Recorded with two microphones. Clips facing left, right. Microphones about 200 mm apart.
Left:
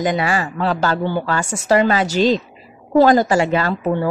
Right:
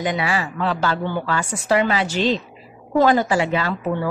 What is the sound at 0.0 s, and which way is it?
A woman's voice, 45° left (ahead or behind).